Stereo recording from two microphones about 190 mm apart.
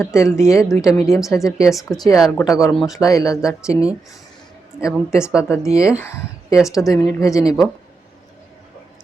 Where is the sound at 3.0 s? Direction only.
20° left (ahead or behind).